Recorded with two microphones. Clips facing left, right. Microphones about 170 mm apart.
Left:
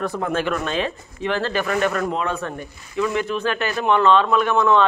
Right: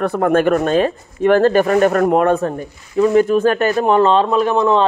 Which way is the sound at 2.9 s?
40° right (ahead or behind).